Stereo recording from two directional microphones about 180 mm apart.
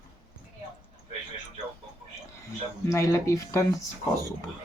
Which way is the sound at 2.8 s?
15° left (ahead or behind).